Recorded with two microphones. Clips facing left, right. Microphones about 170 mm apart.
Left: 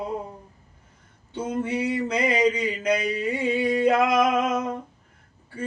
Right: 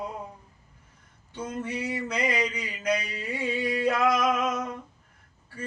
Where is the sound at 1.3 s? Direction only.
25° left (ahead or behind).